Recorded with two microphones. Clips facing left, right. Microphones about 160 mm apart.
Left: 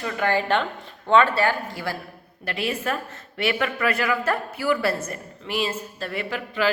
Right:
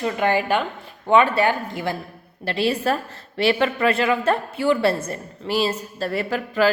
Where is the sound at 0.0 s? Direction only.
20° right (ahead or behind).